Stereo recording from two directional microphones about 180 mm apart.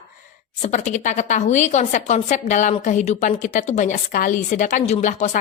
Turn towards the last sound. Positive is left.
turn(degrees=45)  # may be behind; listen again after turning